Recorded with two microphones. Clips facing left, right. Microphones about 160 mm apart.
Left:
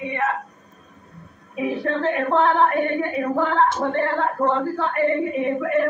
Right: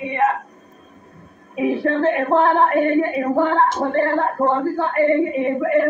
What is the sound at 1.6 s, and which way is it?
A woman's voice, 25° right (ahead or behind).